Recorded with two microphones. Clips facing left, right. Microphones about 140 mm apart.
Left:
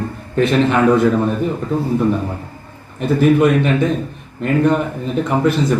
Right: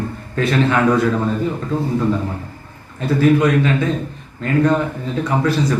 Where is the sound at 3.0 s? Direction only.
20° left (ahead or behind).